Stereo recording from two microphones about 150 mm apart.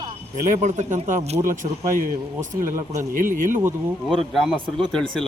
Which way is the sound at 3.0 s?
60° right (ahead or behind).